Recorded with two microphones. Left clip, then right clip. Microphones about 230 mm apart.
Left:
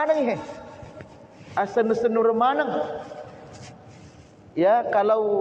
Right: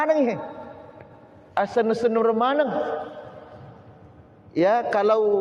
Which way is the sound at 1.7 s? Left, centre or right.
Right.